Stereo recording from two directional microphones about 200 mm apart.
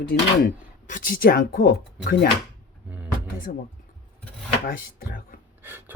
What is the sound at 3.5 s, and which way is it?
Speech, 45° left (ahead or behind).